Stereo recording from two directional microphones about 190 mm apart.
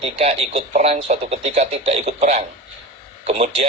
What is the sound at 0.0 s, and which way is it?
Speech, 30° right (ahead or behind).